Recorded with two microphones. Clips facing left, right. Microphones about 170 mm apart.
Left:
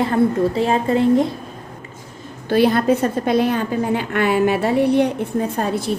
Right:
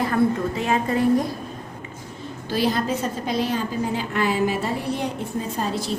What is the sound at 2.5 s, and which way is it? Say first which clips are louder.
A woman's voice: left 8 dB; 60° left (ahead or behind).